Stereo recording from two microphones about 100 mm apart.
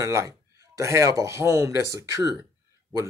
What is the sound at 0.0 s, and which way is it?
Speech, 30° right (ahead or behind).